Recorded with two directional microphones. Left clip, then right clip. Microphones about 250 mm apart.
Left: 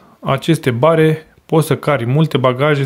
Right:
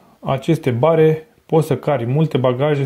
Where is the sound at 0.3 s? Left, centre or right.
Centre.